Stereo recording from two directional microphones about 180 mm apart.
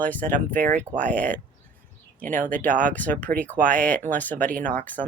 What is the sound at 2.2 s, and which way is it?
Speech, 50° right (ahead or behind).